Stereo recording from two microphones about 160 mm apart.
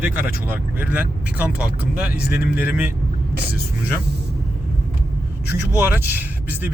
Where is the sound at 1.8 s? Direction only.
75° left (ahead or behind).